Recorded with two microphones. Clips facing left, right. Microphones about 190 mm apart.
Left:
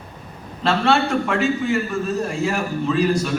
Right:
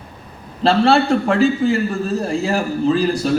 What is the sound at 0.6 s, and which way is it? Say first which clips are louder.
A man's voice: right 5 dB; 35° right (ahead or behind).